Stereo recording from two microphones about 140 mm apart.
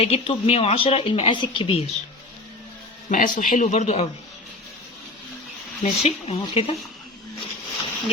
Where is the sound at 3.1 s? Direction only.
70° left (ahead or behind); by 4.1 s 50° left (ahead or behind).